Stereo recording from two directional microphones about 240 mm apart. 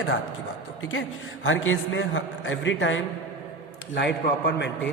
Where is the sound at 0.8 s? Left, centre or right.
Left.